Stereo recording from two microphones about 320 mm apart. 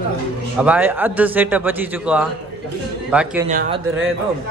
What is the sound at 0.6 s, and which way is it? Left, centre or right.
Speech, centre.